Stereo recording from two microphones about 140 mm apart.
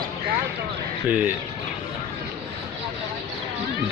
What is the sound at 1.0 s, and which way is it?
Speech, 10° right (ahead or behind).